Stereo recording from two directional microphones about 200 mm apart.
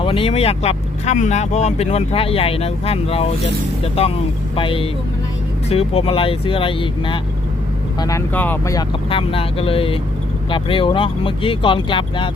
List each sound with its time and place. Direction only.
0.0 s speech: 30° left (ahead or behind); by 8.8 s 10° left (ahead or behind)
9.0 s speech: 25° left (ahead or behind)